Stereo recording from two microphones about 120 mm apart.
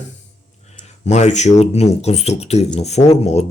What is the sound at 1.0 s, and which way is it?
Speech, 75° left (ahead or behind).